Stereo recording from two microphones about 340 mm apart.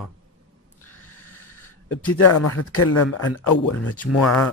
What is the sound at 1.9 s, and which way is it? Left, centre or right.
Speech, left.